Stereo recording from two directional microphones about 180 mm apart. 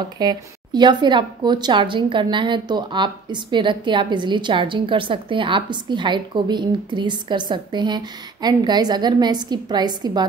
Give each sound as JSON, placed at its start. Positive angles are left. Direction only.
{"t": 0.2, "sound": "a woman's voice", "side_deg": -25}